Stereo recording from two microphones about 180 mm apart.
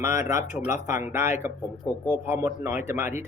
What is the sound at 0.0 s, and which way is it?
Speech, 15° right (ahead or behind).